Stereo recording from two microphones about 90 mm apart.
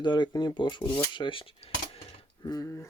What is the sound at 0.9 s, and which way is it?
Cutlery, 65° left (ahead or behind).